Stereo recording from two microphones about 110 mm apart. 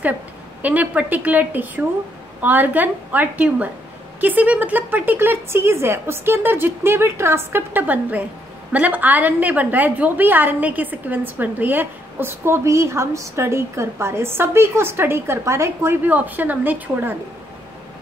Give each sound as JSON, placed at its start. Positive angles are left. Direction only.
{"t": 0.6, "sound": "a woman's voice", "side_deg": -15}